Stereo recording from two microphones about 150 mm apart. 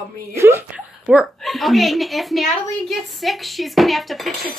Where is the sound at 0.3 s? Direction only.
15° right (ahead or behind).